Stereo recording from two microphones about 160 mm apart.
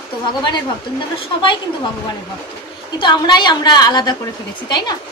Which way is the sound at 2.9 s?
30° left (ahead or behind).